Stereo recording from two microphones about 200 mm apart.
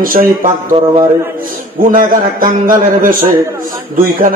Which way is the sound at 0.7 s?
25° right (ahead or behind).